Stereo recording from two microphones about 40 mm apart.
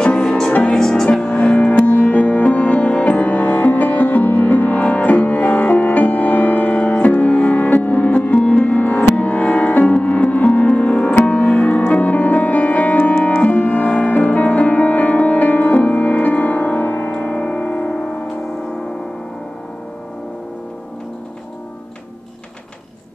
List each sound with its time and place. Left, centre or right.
0.0 s music: left
1.2 s music: left
17.1 s music: left